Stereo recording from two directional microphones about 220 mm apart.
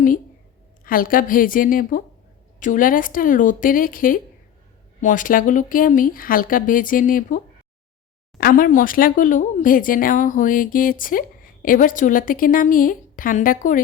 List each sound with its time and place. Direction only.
0.9 s speech: 40° left (ahead or behind)